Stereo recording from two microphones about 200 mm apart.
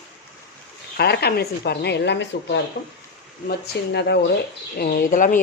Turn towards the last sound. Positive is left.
turn(degrees=40)  # may be behind; listen again after turning